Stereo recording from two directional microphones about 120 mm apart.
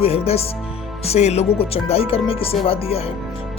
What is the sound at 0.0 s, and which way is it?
Music, 60° left (ahead or behind).